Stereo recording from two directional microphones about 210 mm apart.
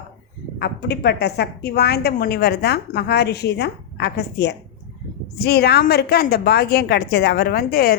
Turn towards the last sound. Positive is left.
turn(degrees=45)  # may be behind; listen again after turning